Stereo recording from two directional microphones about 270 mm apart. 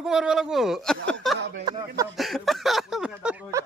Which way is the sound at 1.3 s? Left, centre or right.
Right.